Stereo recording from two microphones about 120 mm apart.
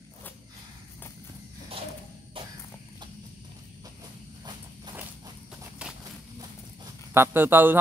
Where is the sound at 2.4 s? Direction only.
45° right (ahead or behind).